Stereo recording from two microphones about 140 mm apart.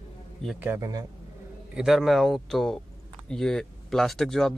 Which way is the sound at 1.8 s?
Centre (ahead or behind).